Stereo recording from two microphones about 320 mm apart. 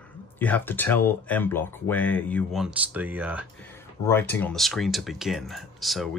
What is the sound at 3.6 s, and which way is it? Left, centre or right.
Speech, centre.